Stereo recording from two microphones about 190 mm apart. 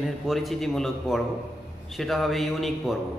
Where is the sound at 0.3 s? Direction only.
Centre (ahead or behind).